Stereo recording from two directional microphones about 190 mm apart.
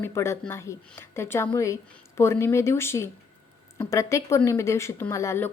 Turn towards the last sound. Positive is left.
turn(degrees=15)  # may be behind; listen again after turning